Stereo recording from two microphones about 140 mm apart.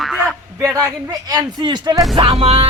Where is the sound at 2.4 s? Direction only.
45° right (ahead or behind).